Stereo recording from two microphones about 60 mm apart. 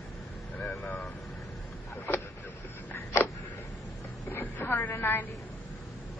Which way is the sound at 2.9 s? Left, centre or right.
Left.